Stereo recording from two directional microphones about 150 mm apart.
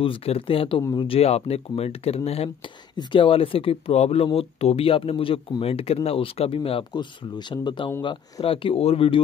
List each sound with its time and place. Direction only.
0.0 s speech: 40° left (ahead or behind)